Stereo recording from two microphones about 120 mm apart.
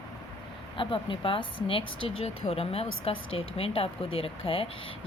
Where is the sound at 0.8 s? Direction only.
45° left (ahead or behind).